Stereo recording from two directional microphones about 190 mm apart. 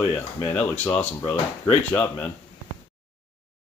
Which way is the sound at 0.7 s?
10° left (ahead or behind).